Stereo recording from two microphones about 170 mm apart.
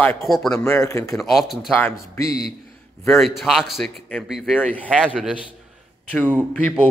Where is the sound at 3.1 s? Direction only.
Centre (ahead or behind).